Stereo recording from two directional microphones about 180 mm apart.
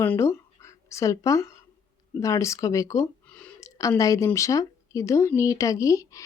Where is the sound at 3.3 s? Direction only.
5° left (ahead or behind).